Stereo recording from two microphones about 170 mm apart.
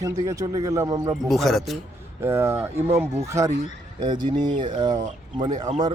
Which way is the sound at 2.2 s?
15° right (ahead or behind).